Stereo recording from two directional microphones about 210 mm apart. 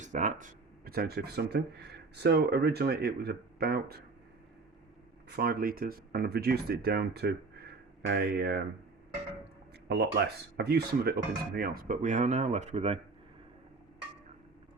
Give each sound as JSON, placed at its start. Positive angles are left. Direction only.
{"t": 0.0, "sound": "speech", "side_deg": -35}
{"t": 5.4, "sound": "speech", "side_deg": -45}
{"t": 9.9, "sound": "speech", "side_deg": -50}